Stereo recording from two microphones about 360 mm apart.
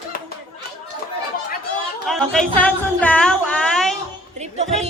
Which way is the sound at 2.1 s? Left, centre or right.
Centre.